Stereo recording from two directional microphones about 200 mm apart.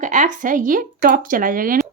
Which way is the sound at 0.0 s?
40° right (ahead or behind).